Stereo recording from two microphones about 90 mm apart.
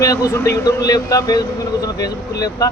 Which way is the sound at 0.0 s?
40° left (ahead or behind).